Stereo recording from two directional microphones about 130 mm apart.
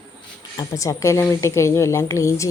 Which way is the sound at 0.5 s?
25° left (ahead or behind).